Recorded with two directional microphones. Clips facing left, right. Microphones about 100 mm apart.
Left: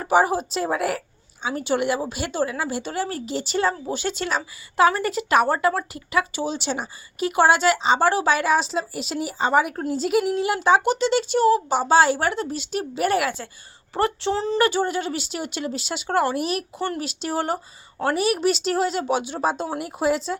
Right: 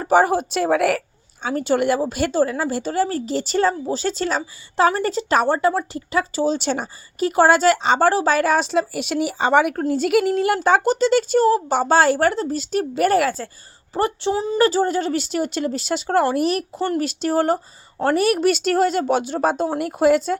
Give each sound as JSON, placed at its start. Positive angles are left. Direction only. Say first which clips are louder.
{"t": 0.0, "sound": "speech", "louder": "right 3 dB", "side_deg": -45}
{"t": 0.5, "sound": "speech", "louder": "right 6 dB", "side_deg": -70}
{"t": 1.4, "sound": "a woman's voice", "louder": "right 4 dB", "side_deg": -45}
{"t": 2.3, "sound": "a woman's voice", "louder": "right 2 dB", "side_deg": -40}
{"t": 8.9, "sound": "speech", "louder": "right 5 dB", "side_deg": -70}
{"t": 9.9, "sound": "a woman's voice", "louder": "right 2 dB", "side_deg": -65}
{"t": 13.9, "sound": "speech", "louder": "right 2 dB", "side_deg": -25}
{"t": 14.3, "sound": "speech", "louder": "right 1 dB", "side_deg": -10}
{"t": 14.6, "sound": "a woman's voice", "louder": "right 6 dB", "side_deg": -35}